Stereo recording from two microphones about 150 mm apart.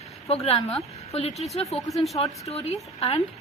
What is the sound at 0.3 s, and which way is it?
Speech, 40° left (ahead or behind).